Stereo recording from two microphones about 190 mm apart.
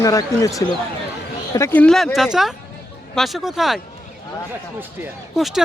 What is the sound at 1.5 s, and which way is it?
Speech, 15° left (ahead or behind).